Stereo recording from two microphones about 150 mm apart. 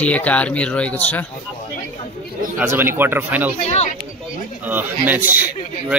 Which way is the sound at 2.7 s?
15° right (ahead or behind).